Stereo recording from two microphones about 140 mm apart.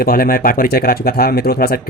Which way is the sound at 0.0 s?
90° left.